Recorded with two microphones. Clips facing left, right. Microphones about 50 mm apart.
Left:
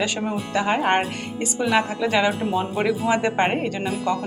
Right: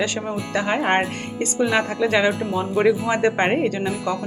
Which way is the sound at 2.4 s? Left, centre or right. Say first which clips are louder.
Even; left.